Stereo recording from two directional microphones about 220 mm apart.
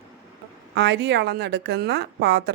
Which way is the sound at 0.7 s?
50° right (ahead or behind).